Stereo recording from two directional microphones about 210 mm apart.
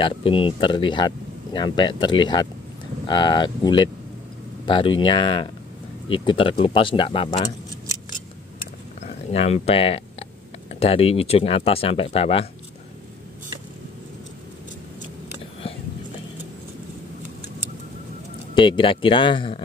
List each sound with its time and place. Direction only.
0.0 s speech: 25° left (ahead or behind)
9.0 s speech: 30° left (ahead or behind)
18.5 s speech: 25° left (ahead or behind)